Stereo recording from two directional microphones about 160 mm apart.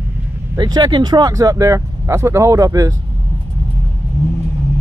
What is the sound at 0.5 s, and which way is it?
Speech, 25° right (ahead or behind).